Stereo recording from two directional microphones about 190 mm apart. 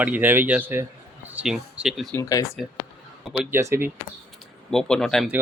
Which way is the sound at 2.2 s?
15° left (ahead or behind).